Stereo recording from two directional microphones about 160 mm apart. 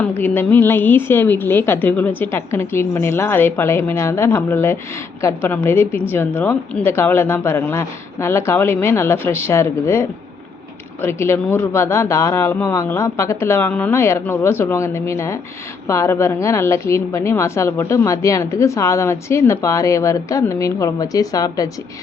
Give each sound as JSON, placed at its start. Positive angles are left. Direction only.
{"t": 0.0, "sound": "a woman's voice", "side_deg": 10}